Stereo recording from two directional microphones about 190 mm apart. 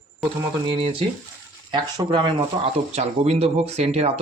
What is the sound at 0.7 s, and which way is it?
Speech, 25° right (ahead or behind).